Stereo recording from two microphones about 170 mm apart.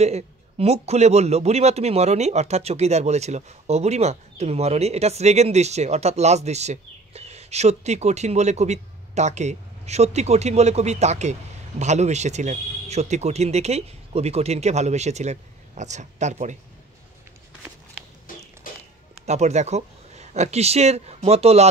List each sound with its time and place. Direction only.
0.0 s a man's voice: 40° right (ahead or behind)
18.6 s a sound: 55° left (ahead or behind)
19.2 s speech: 40° right (ahead or behind)